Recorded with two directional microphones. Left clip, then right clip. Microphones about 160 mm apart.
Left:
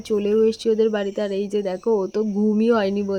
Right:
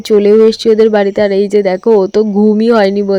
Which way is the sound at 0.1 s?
40° right (ahead or behind).